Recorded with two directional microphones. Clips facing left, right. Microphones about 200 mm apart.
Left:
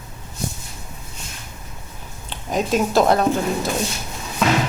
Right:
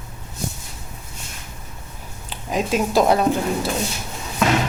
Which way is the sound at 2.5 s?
10° right (ahead or behind).